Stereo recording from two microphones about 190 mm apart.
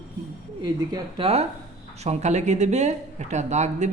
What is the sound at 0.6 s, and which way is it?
Speech, 25° right (ahead or behind).